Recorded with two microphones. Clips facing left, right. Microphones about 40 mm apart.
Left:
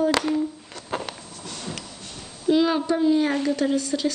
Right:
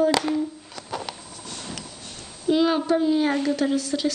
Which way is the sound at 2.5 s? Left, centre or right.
Centre.